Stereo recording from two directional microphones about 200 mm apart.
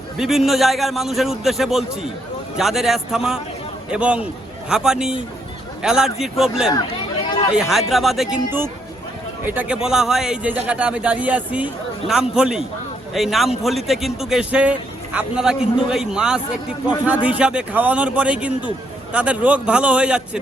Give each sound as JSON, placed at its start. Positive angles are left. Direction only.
{"t": 0.2, "sound": "a man's voice", "side_deg": 0}